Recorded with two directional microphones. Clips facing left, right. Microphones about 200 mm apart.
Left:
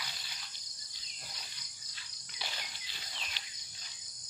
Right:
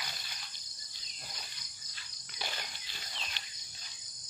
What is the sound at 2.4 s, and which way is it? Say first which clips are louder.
Cricket: right 3 dB; 50° right (ahead or behind).